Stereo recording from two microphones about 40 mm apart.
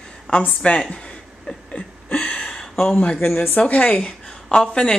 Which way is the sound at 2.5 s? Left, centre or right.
Centre.